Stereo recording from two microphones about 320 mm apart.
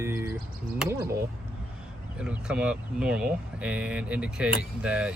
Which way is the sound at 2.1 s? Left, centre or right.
Centre.